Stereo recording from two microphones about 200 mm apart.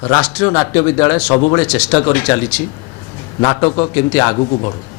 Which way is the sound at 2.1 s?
10° left (ahead or behind).